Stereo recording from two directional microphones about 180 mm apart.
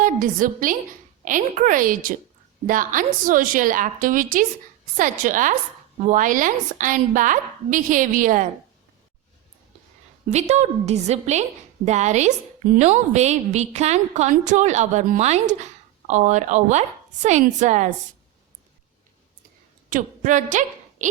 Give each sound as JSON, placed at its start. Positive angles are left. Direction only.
{"t": 0.0, "sound": "a woman's voice", "side_deg": -50}
{"t": 10.2, "sound": "a woman's voice", "side_deg": -40}
{"t": 19.9, "sound": "a woman's voice", "side_deg": -45}